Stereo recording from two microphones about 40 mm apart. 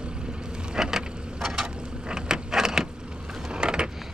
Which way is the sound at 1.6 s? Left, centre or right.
Right.